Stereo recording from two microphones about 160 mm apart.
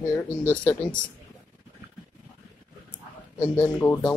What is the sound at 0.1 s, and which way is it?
Speech, 15° left (ahead or behind).